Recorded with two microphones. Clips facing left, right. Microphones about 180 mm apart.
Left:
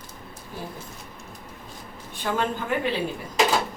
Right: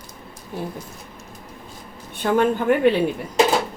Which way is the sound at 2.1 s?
55° right (ahead or behind).